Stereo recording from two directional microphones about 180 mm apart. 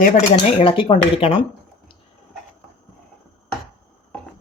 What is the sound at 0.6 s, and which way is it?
Speech, 30° left (ahead or behind).